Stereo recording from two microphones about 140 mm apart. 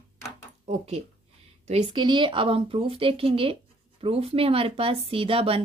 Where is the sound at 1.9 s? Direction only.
35° right (ahead or behind).